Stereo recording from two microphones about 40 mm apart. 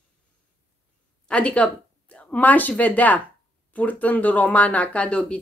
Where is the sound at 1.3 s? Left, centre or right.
Left.